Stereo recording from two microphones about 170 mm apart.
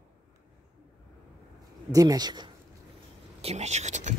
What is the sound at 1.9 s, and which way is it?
Speech, 25° right (ahead or behind).